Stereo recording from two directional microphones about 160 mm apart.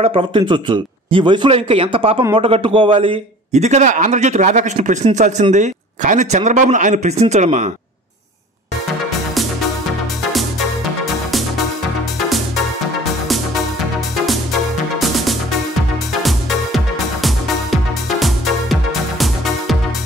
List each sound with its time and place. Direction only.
0.0 s a man's voice: 30° right (ahead or behind); by 7.7 s 50° right (ahead or behind)
15.0 s music: centre (ahead or behind)